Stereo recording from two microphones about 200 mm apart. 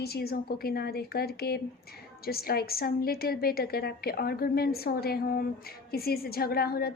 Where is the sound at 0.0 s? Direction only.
50° left (ahead or behind).